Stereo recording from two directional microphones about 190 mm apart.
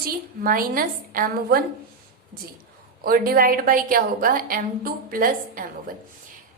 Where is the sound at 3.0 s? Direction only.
50° right (ahead or behind).